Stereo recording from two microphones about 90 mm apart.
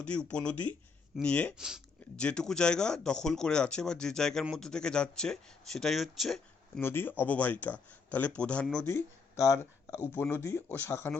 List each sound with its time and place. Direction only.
0.0 s speech: 10° left (ahead or behind)
1.5 s speech: 5° right (ahead or behind)
2.1 s speech: 10° left (ahead or behind)
6.8 s speech: 25° left (ahead or behind)
8.9 s speech: 30° left (ahead or behind)
10.3 s speech: 25° left (ahead or behind)